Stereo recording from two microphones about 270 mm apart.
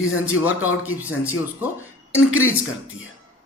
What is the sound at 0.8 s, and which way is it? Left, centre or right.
Speech, centre.